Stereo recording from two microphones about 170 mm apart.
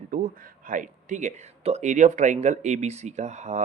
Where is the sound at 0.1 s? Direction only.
55° right (ahead or behind).